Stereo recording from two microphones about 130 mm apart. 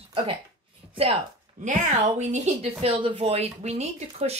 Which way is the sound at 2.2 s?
55° right (ahead or behind).